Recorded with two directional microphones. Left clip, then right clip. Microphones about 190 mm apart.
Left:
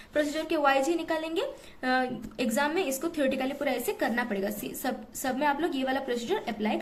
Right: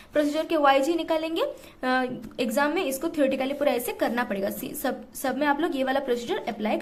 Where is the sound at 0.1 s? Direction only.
25° right (ahead or behind).